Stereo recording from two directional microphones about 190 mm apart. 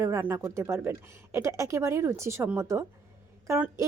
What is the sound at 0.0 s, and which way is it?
A woman's voice, 15° right (ahead or behind).